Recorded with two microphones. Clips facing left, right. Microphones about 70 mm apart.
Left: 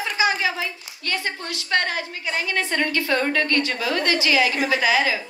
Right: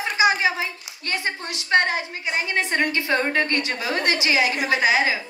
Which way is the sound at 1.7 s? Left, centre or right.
Right.